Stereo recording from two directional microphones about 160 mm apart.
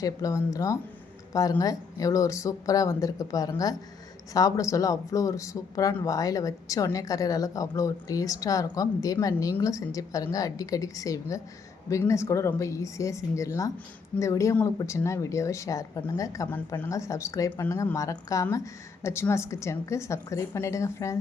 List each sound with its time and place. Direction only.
0.0 s speech: 20° left (ahead or behind)